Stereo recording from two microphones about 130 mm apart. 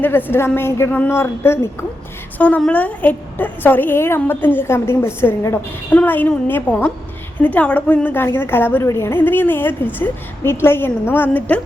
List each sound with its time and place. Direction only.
0.0 s a woman's voice: 15° left (ahead or behind)
2.4 s a woman's voice: 10° left (ahead or behind)